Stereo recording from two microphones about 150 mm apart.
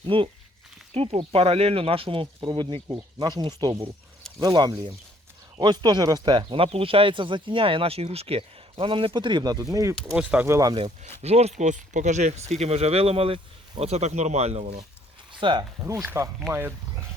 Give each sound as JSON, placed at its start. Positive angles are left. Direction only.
{"t": 0.0, "sound": "speech", "side_deg": -35}
{"t": 10.2, "sound": "speech", "side_deg": -15}
{"t": 11.2, "sound": "speech", "side_deg": -45}
{"t": 15.3, "sound": "a sound", "side_deg": -35}
{"t": 16.0, "sound": "speech", "side_deg": -20}